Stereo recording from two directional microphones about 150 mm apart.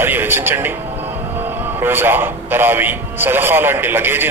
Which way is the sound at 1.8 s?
15° right (ahead or behind).